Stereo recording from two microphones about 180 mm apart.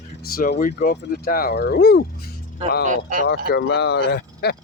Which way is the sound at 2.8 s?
45° right (ahead or behind).